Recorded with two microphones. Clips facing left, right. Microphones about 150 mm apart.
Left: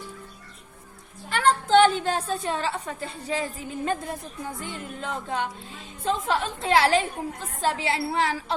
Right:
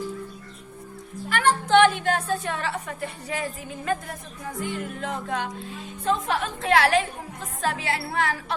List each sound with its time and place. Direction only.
1.3 s a woman's voice: 30° left (ahead or behind)
4.6 s music: 30° left (ahead or behind)
6.4 s a woman's voice: 30° left (ahead or behind)